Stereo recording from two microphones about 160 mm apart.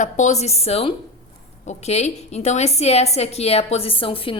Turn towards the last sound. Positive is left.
turn(degrees=35)  # may be behind; listen again after turning